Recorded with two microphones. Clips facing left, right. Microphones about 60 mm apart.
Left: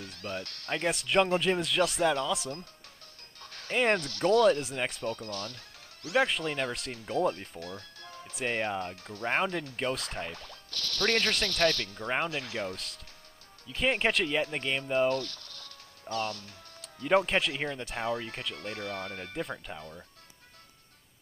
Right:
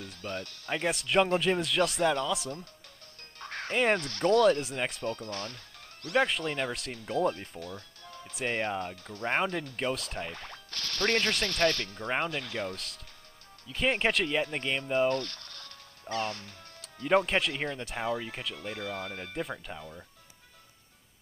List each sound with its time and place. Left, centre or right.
0.0 s music: centre
0.7 s speech: centre
3.3 s music: right
3.7 s speech: centre
5.3 s speech: right
6.0 s speech: centre
10.3 s speech: right
12.0 s speech: centre
15.0 s a sound: right
16.8 s speech: centre